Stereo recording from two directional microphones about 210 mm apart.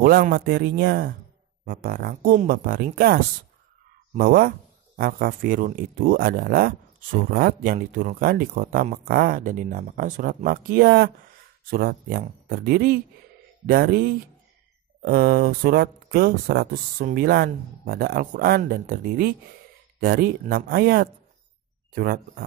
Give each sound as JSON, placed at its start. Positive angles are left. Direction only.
{"t": 0.0, "sound": "speech", "side_deg": -45}